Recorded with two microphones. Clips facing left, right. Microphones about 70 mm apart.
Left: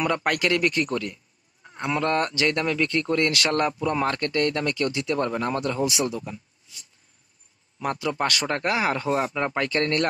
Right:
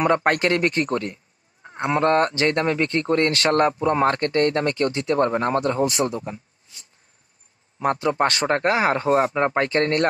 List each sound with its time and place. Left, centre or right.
0.0 s speech: right
7.8 s speech: right